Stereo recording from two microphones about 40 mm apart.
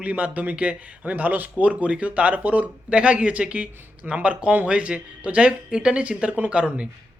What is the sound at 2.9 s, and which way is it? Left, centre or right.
A man's voice, right.